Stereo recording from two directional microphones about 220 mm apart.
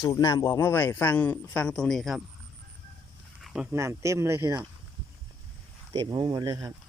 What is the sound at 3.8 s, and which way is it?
Speech, 15° right (ahead or behind).